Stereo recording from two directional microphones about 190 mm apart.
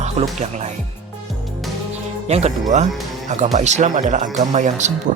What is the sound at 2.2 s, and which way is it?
Speech, 35° right (ahead or behind).